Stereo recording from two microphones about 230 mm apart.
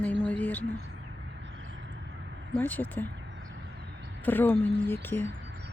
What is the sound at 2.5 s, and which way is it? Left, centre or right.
Speech, centre.